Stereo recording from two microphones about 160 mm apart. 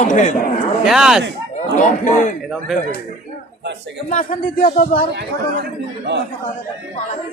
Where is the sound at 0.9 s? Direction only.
5° right (ahead or behind).